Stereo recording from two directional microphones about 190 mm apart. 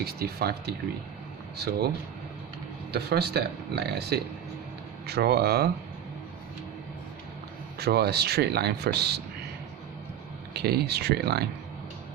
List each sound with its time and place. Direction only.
0.0 s speech: 55° right (ahead or behind)
2.9 s speech: 60° right (ahead or behind)
7.8 s speech: 55° right (ahead or behind)
10.5 s speech: 55° right (ahead or behind)